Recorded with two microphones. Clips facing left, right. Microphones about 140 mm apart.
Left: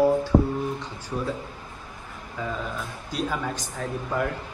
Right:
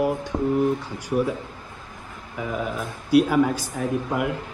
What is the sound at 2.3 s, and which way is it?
Speech, 10° right (ahead or behind).